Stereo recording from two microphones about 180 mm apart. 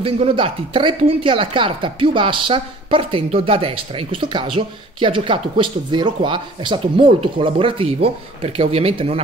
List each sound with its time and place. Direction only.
0.0 s speech: 30° right (ahead or behind)